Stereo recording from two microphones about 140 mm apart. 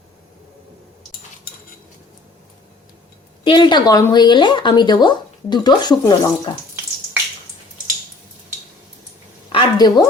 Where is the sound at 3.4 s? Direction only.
35° left (ahead or behind).